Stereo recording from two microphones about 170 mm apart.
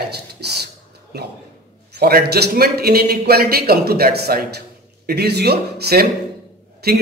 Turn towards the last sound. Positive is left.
turn(degrees=-70)  # may be behind; listen again after turning